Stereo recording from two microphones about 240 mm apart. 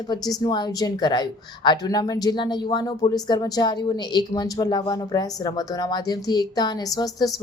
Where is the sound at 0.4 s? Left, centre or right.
Centre.